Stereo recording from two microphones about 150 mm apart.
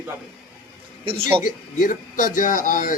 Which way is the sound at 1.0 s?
40° right (ahead or behind).